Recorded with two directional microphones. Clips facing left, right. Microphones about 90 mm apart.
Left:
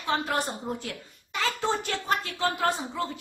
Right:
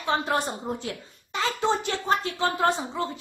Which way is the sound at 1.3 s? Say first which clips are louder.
Right 3 dB; 20° right (ahead or behind).